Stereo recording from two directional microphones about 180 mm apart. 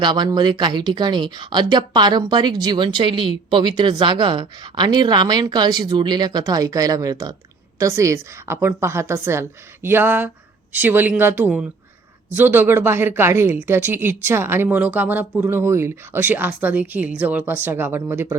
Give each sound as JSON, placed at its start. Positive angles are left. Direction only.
{"t": 0.0, "sound": "speech", "side_deg": -25}